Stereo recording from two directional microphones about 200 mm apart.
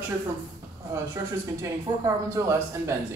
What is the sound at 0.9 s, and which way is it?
A man's voice, 15° right (ahead or behind).